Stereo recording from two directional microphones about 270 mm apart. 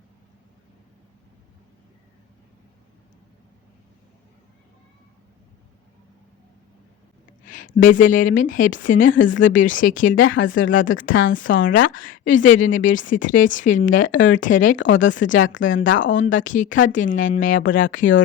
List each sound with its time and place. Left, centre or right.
7.4 s a woman's voice: left
11.6 s speech: left
11.9 s a woman's voice: left
15.7 s speech: left
16.3 s a woman's voice: left